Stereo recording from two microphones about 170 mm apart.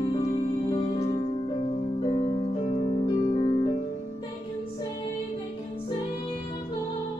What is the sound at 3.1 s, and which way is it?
Music, 30° left (ahead or behind).